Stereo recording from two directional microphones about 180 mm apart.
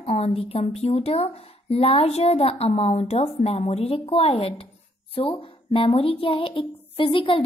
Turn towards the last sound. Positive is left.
turn(degrees=30)  # may be behind; listen again after turning